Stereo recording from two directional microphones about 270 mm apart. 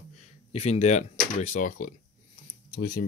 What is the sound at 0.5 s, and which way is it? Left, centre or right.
Speech, left.